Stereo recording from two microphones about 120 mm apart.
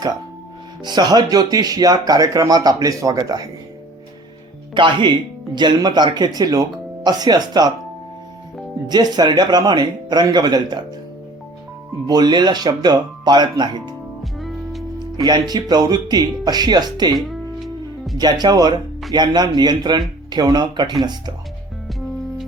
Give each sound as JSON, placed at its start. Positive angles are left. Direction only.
{"t": 0.9, "sound": "speech", "side_deg": -35}
{"t": 4.7, "sound": "speech", "side_deg": -40}
{"t": 8.9, "sound": "speech", "side_deg": -35}
{"t": 12.0, "sound": "speech", "side_deg": -35}
{"t": 14.3, "sound": "music", "side_deg": 0}
{"t": 14.9, "sound": "speech", "side_deg": -35}
{"t": 18.2, "sound": "speech", "side_deg": -35}